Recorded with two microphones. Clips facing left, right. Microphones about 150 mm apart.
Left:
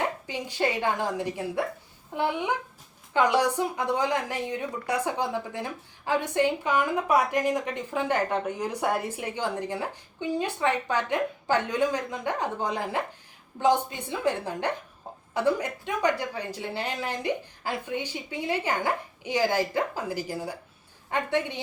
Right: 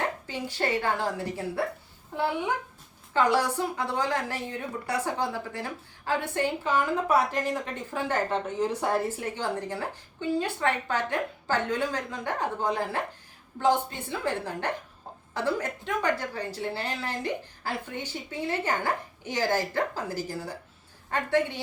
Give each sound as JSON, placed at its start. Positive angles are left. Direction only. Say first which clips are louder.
{"t": 0.0, "sound": "a woman's voice", "louder": "left 1 dB", "side_deg": 15}